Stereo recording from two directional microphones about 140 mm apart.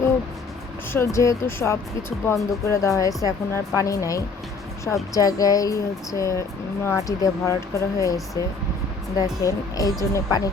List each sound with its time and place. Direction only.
0.9 s speech: 20° left (ahead or behind)